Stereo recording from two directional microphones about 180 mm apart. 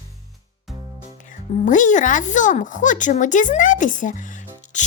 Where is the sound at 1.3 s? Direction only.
45° left (ahead or behind).